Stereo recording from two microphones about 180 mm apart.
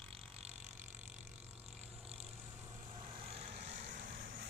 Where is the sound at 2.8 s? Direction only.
30° right (ahead or behind); by 4.4 s 55° right (ahead or behind).